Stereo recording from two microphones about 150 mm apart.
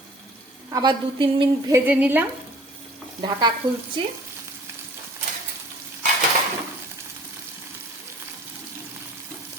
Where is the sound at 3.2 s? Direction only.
30° right (ahead or behind).